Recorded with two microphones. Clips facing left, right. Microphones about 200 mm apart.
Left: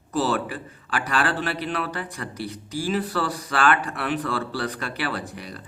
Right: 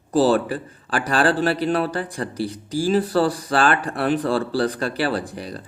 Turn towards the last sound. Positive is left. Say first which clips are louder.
# right 6 dB
turn(degrees=-35)  # may be behind; listen again after turning